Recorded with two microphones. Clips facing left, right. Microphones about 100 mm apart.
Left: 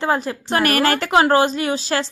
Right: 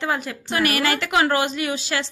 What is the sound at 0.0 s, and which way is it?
A woman's voice, 35° left (ahead or behind).